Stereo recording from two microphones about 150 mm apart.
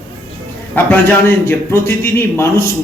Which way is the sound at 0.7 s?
15° left (ahead or behind).